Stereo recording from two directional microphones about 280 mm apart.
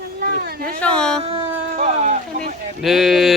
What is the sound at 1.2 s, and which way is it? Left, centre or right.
Speech, centre.